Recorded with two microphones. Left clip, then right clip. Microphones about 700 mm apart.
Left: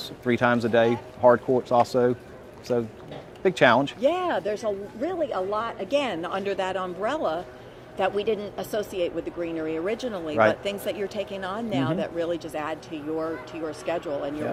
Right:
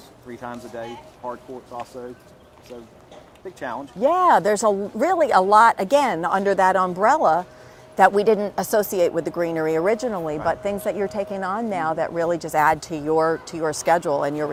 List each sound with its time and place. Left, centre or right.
0.3 s speech: left
3.4 s speech: left
4.0 s a woman's voice: right